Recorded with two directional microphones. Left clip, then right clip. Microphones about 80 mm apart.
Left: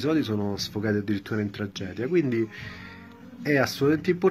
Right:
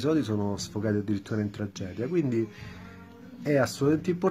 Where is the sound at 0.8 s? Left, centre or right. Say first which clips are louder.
Left 1 dB; right.